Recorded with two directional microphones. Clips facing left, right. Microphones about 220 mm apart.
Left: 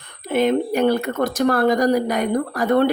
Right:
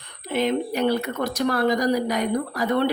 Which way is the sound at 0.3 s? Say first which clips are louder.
Left 5 dB; 50° left (ahead or behind).